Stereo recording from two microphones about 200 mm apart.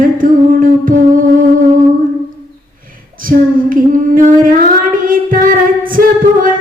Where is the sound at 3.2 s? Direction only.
45° right (ahead or behind).